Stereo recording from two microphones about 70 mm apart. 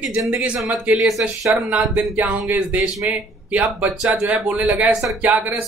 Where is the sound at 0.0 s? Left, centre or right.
Centre.